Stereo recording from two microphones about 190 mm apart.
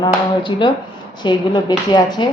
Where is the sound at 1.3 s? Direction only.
25° left (ahead or behind).